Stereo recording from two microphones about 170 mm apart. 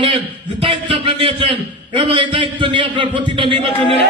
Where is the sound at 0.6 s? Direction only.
30° right (ahead or behind).